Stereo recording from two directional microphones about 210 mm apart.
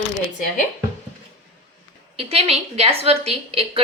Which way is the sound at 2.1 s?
30° right (ahead or behind).